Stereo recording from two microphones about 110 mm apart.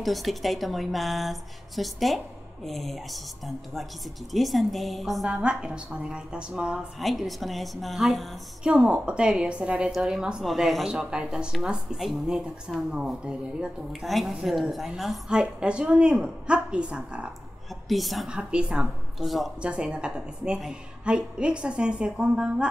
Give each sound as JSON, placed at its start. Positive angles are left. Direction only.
{"t": 0.0, "sound": "a woman's voice", "side_deg": 0}